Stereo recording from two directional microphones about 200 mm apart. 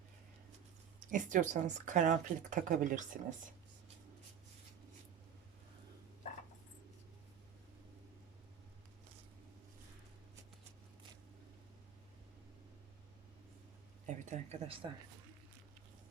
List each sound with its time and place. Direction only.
1.1 s speech: 40° right (ahead or behind)
14.3 s speech: 30° right (ahead or behind)